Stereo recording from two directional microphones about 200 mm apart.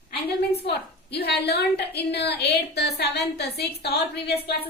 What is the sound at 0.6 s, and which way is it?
A woman's voice, 55° left (ahead or behind).